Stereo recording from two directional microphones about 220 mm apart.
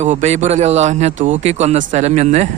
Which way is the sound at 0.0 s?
30° right (ahead or behind).